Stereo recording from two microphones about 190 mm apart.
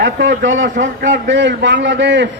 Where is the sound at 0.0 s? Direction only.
70° right (ahead or behind).